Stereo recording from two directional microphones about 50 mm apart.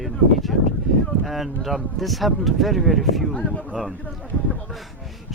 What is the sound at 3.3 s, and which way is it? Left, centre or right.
Speech, left.